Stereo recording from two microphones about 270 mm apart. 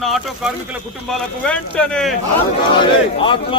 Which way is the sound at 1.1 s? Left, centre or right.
Centre.